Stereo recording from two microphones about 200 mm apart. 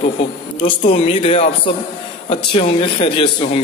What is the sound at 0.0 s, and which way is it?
A man's voice, 40° left (ahead or behind).